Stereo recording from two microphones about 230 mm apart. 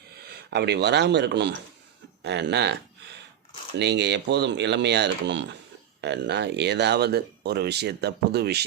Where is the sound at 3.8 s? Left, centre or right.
Right.